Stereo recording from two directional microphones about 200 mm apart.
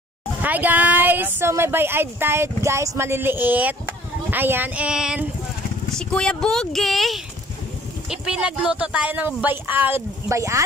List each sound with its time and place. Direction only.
0.4 s speech: 10° right (ahead or behind)